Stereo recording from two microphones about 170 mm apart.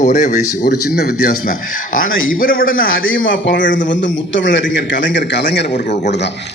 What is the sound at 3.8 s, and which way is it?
A man's voice, 90° left.